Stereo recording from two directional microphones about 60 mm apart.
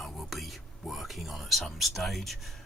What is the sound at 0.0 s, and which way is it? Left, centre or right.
Whispering, centre.